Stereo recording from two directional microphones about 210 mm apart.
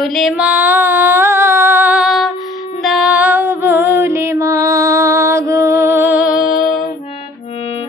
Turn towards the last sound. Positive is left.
turn(degrees=40)  # may be behind; listen again after turning